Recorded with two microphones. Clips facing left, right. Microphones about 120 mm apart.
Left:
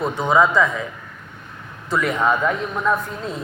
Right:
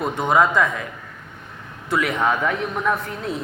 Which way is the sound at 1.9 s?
70° right (ahead or behind).